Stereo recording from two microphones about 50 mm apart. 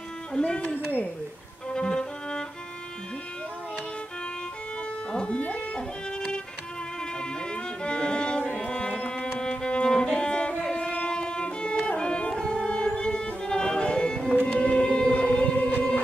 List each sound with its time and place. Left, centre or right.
0.4 s speech: left
1.7 s violin: centre
5.1 s speech: centre
5.8 s music: centre
14.5 s civil defense siren: left